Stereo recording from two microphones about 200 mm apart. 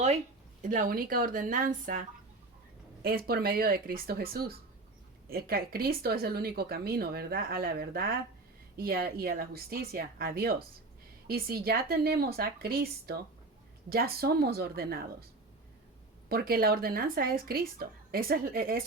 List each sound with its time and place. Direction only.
0.6 s speech: 40° right (ahead or behind)
16.3 s speech: 50° right (ahead or behind)